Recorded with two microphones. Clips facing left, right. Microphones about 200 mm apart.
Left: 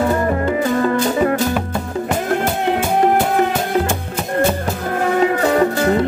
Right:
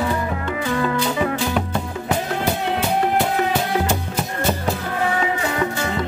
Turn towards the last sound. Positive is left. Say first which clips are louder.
# left 8 dB
turn(degrees=55)  # may be behind; listen again after turning